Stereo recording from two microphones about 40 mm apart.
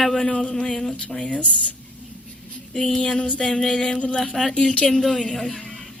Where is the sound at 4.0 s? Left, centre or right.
Left.